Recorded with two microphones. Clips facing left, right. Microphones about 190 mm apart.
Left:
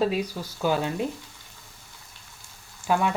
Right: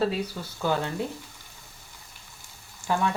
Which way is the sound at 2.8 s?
25° left (ahead or behind).